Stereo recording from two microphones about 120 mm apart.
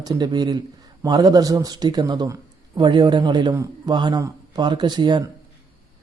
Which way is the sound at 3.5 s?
25° right (ahead or behind).